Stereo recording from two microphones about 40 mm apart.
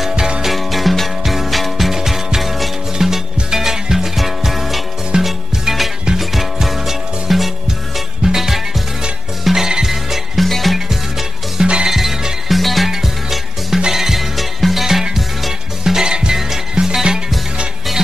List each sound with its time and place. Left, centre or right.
0.4 s music: centre
8.2 s music: centre
11.6 s music: right
11.9 s music: centre